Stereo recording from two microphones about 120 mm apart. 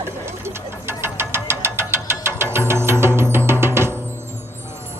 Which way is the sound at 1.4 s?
20° right (ahead or behind).